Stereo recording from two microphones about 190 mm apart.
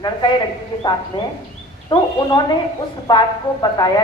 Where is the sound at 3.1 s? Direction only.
20° left (ahead or behind).